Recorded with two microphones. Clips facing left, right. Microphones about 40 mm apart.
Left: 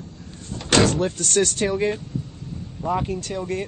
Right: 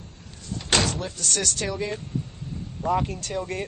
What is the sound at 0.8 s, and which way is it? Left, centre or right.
Speech, left.